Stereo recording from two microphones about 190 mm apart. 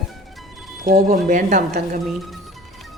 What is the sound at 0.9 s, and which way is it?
Speech, 45° right (ahead or behind).